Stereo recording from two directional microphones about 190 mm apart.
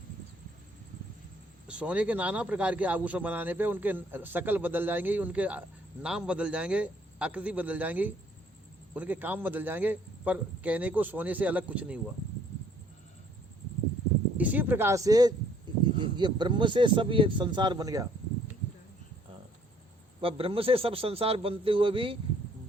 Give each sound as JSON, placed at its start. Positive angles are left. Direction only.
{"t": 1.6, "sound": "a man's voice", "side_deg": -5}
{"t": 14.3, "sound": "speech", "side_deg": -10}
{"t": 20.2, "sound": "speech", "side_deg": -30}